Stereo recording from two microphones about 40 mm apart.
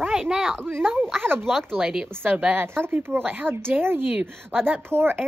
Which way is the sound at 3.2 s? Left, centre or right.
Right.